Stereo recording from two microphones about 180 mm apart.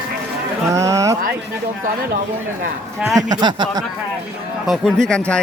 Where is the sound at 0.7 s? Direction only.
15° right (ahead or behind).